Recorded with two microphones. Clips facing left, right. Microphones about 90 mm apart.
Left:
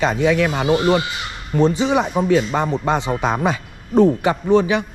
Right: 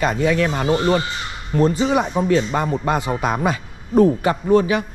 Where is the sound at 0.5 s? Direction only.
10° left (ahead or behind).